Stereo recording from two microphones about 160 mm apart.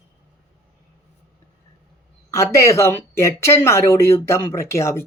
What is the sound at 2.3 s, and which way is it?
Speech, 20° left (ahead or behind).